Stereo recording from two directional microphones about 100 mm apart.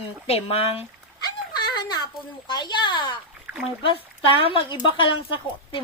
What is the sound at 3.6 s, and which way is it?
Speech, 65° left (ahead or behind).